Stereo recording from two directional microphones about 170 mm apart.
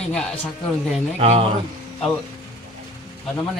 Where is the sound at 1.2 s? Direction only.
40° right (ahead or behind).